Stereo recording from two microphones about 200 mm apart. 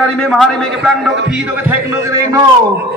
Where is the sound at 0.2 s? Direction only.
Centre (ahead or behind); by 2.4 s 15° right (ahead or behind).